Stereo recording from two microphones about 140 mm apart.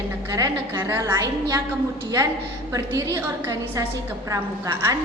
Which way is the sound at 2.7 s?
25° right (ahead or behind).